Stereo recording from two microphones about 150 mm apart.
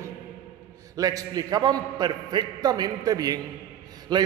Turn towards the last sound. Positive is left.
turn(degrees=-30)  # may be behind; listen again after turning